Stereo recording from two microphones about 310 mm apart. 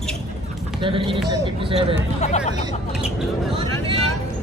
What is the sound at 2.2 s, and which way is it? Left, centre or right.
Speech, left.